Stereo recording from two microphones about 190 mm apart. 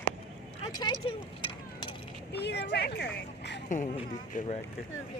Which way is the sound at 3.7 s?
40° left (ahead or behind).